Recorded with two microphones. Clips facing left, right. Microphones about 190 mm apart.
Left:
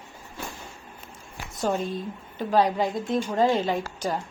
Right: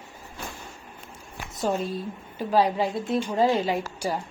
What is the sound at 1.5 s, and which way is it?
A woman's voice, centre (ahead or behind).